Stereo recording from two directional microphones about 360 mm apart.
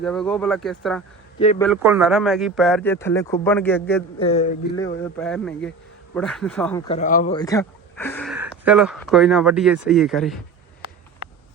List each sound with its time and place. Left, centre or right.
0.0 s speech: centre
1.4 s speech: centre
1.6 s speech: centre
4.3 s speech: centre
5.1 s speech: centre; by 7.3 s left
7.3 s speech: centre